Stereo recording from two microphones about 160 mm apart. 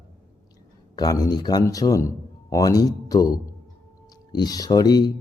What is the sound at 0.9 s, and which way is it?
A man's voice, 25° left (ahead or behind).